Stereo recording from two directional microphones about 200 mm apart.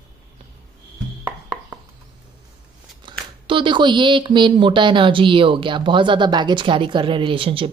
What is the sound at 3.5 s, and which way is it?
A woman's voice, 25° right (ahead or behind).